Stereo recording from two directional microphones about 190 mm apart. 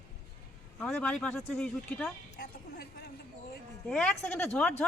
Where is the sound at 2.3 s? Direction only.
50° left (ahead or behind).